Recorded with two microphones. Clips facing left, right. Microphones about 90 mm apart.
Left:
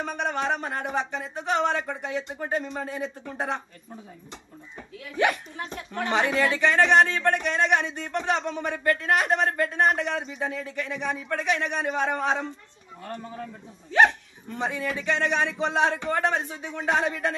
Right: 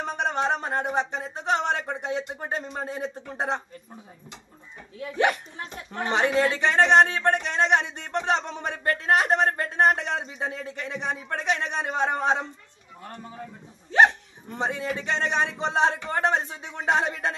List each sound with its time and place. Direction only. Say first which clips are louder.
0.0 s a man's voice: right 2 dB; 25° right (ahead or behind)
4.9 s a man's voice: right 1 dB; 30° right (ahead or behind)
14.6 s a man's voice: right 1 dB; 25° right (ahead or behind)